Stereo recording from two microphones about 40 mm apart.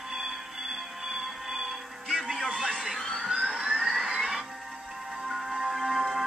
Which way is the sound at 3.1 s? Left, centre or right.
Centre.